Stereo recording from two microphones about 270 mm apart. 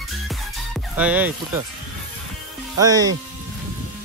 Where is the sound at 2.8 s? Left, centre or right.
Centre.